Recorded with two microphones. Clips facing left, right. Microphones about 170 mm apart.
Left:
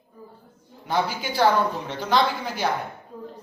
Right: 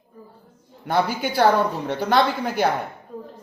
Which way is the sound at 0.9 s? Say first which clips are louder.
Right 3 dB; 55° right (ahead or behind).